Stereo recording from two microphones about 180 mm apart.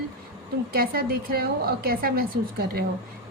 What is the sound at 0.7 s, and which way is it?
A woman's voice, 55° right (ahead or behind).